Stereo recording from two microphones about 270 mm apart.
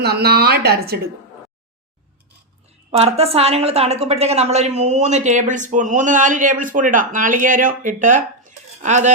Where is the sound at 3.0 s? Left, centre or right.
Right.